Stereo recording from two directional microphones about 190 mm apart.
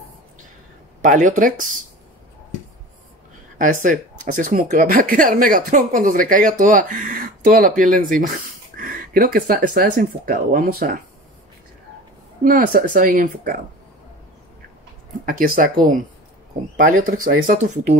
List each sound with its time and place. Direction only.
1.0 s speech: 40° right (ahead or behind)
3.5 s speech: 45° right (ahead or behind)
12.4 s speech: 45° right (ahead or behind)
15.2 s speech: 50° right (ahead or behind)